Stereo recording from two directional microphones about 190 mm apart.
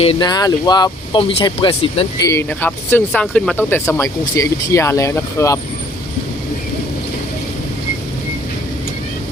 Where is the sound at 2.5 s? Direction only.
10° left (ahead or behind).